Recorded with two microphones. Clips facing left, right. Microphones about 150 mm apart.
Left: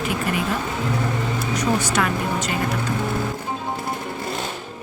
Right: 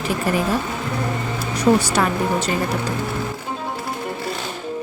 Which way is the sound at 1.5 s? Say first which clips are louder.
Right 6 dB; 30° right (ahead or behind).